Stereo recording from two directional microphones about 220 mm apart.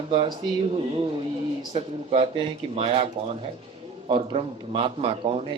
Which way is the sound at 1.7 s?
25° right (ahead or behind).